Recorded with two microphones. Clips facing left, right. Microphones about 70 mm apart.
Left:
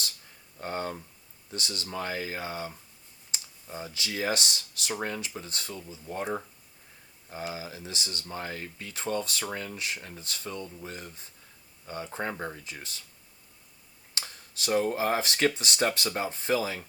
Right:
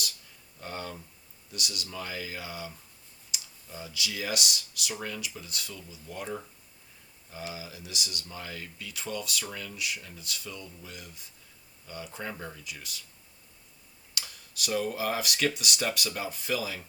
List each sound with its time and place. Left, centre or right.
0.6 s speech: left
7.3 s speech: left
14.2 s speech: left